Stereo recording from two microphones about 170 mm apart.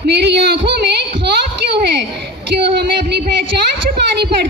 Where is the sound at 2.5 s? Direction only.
75° right (ahead or behind).